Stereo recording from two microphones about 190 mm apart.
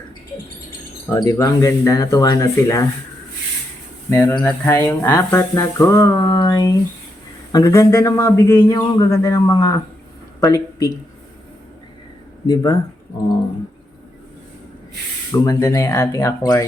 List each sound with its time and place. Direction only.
1.1 s a man's voice: 15° left (ahead or behind)
4.1 s a man's voice: 10° left (ahead or behind)
6.2 s a sound: 20° left (ahead or behind)
7.5 s a man's voice: 15° left (ahead or behind)
12.5 s speech: 20° left (ahead or behind)
15.3 s a man's voice: 15° left (ahead or behind)